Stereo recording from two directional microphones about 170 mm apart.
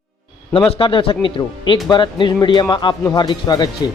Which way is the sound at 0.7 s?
30° left (ahead or behind).